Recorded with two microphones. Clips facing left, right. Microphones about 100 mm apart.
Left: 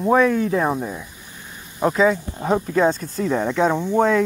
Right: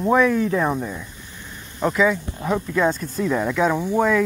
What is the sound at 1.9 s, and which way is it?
Speech, 30° left (ahead or behind).